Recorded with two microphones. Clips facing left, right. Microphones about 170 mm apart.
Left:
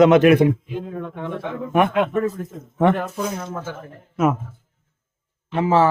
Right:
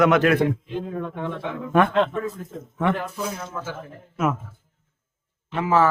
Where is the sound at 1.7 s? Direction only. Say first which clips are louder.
Left 1 dB; 15° left (ahead or behind).